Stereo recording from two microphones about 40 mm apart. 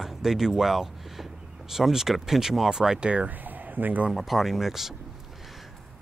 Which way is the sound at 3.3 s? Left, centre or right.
Right.